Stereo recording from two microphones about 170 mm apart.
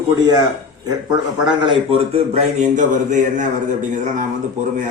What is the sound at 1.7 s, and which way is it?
A man's voice, 35° right (ahead or behind).